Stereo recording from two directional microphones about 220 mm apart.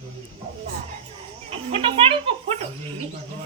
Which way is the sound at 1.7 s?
25° right (ahead or behind).